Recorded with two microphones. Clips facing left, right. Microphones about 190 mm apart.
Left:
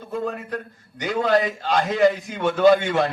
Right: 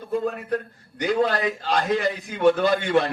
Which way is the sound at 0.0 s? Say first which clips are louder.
Right 2 dB; 55° right (ahead or behind).